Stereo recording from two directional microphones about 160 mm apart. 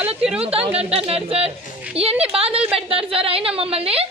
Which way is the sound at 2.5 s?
5° right (ahead or behind).